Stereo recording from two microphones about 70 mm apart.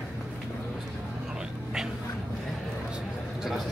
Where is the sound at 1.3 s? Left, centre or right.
Centre.